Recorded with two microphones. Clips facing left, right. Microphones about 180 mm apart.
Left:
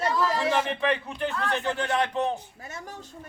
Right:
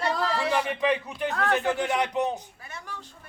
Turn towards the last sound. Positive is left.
turn(degrees=45)  # may be behind; listen again after turning